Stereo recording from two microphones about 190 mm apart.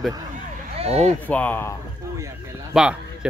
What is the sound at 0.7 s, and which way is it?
Speech, 35° right (ahead or behind).